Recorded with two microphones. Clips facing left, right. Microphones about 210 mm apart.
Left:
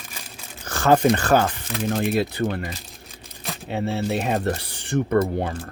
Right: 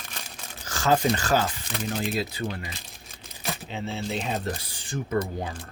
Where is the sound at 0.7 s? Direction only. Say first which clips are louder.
Left 6 dB; 60° left (ahead or behind).